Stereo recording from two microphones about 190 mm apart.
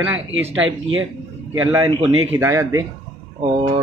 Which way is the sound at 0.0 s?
90° right.